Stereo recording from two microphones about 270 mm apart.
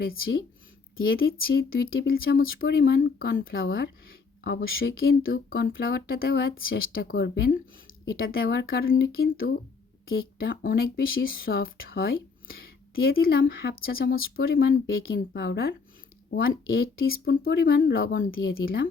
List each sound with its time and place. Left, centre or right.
0.0 s speech: left